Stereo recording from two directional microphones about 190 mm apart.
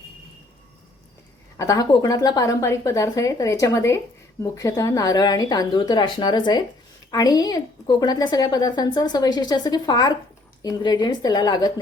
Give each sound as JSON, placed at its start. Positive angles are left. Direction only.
{"t": 1.5, "sound": "a woman's voice", "side_deg": 20}